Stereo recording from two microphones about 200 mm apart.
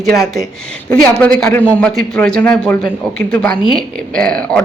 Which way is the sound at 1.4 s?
5° left (ahead or behind).